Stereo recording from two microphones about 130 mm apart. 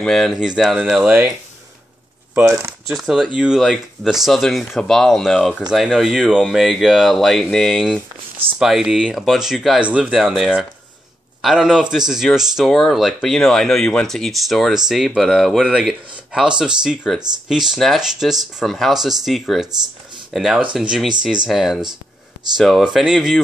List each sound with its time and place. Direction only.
0.0 s speech: centre (ahead or behind)
2.3 s speech: 20° right (ahead or behind)
2.9 s speech: centre (ahead or behind)